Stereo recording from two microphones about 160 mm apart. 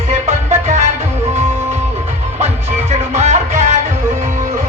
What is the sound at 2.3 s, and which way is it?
Music, 45° right (ahead or behind).